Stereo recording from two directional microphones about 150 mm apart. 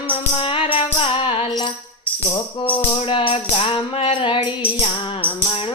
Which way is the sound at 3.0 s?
35° left (ahead or behind).